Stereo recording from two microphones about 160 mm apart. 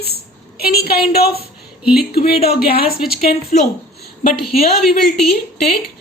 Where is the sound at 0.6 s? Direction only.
75° left (ahead or behind).